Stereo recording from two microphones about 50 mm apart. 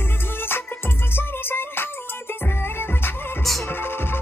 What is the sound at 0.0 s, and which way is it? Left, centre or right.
Music, left.